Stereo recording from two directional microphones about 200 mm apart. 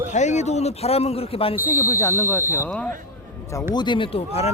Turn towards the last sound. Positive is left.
turn(degrees=30)  # may be behind; listen again after turning